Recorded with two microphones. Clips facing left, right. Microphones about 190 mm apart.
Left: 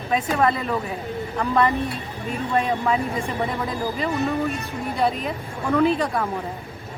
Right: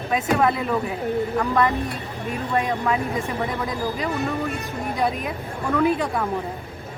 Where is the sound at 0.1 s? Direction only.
Centre (ahead or behind).